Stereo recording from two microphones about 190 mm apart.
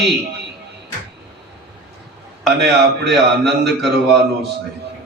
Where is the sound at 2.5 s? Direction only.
60° right (ahead or behind).